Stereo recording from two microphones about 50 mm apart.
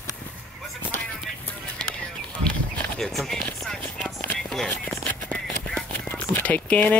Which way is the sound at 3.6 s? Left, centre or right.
Centre.